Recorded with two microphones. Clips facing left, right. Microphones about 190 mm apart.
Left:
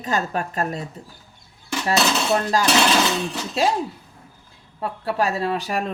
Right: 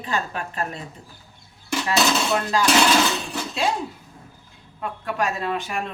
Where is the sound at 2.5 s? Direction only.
40° left (ahead or behind).